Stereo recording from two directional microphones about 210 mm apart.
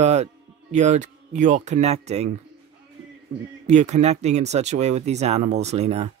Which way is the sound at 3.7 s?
35° right (ahead or behind).